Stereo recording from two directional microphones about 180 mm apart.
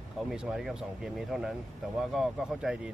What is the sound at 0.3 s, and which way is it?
Speech, centre (ahead or behind).